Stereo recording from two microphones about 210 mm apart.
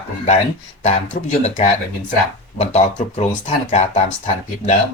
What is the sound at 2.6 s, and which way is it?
Speech, 30° left (ahead or behind).